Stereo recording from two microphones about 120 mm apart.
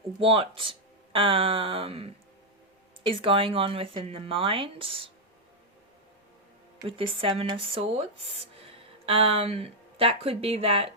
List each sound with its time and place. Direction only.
0.2 s speech: 50° right (ahead or behind)
6.8 s speech: 50° right (ahead or behind)